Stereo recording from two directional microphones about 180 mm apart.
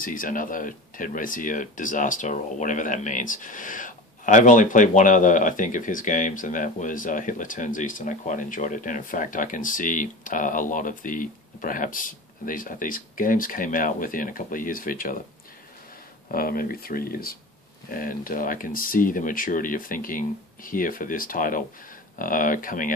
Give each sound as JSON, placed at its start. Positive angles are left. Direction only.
{"t": 0.0, "sound": "speech", "side_deg": 50}
{"t": 16.3, "sound": "speech", "side_deg": 55}